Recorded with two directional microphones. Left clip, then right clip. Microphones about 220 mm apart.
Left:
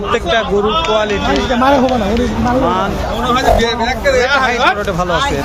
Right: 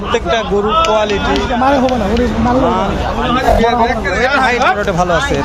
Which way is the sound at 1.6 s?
35° left (ahead or behind).